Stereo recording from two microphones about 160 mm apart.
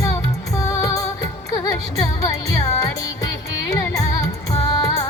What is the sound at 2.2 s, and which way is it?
Music, 20° left (ahead or behind).